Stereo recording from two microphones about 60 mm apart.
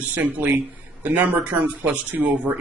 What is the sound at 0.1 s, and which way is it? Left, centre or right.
Speech, right.